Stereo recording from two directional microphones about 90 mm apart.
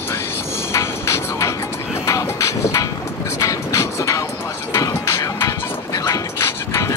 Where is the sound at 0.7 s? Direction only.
35° left (ahead or behind).